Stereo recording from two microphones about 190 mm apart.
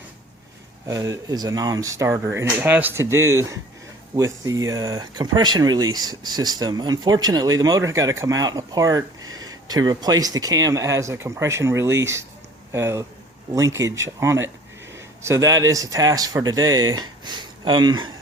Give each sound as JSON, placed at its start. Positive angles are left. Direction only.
{"t": 0.9, "sound": "speech", "side_deg": -20}